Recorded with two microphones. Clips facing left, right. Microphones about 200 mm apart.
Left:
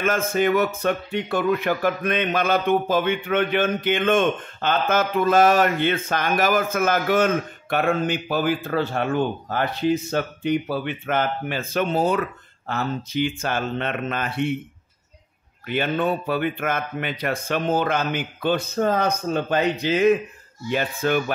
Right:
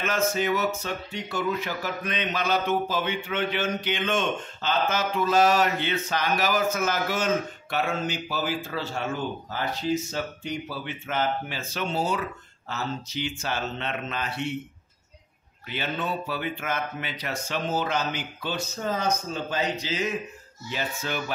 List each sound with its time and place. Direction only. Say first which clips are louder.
0.0 s speech: left 5 dB; 50° left (ahead or behind)
15.6 s speech: left 8 dB; 55° left (ahead or behind)